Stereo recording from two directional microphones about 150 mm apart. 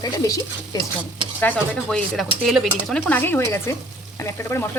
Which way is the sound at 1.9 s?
Centre (ahead or behind).